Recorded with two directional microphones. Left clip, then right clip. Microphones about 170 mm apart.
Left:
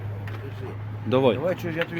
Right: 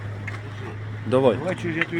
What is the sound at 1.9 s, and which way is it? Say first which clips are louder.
Speech: right 5 dB; 35° left (ahead or behind).